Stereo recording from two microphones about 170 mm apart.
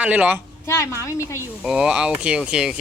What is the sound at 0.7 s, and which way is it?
Speech, 15° left (ahead or behind).